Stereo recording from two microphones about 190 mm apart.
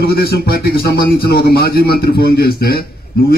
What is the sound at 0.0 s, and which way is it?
A man's voice, 55° left (ahead or behind).